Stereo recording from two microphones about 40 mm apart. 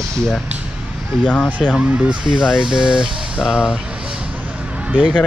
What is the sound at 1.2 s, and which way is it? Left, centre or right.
Speech, left.